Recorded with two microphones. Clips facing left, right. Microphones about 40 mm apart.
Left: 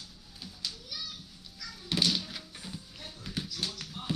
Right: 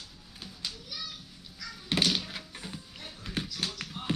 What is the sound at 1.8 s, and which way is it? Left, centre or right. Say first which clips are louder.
Music: right 2 dB; right.